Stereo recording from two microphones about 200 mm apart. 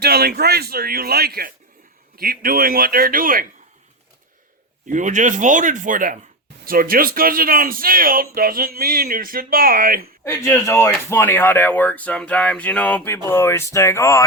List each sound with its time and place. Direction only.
0.0 s speech: 50° right (ahead or behind)
4.9 s speech: 40° right (ahead or behind)
10.2 s speech: 10° left (ahead or behind)